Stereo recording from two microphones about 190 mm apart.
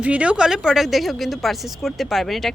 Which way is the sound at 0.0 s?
5° right (ahead or behind).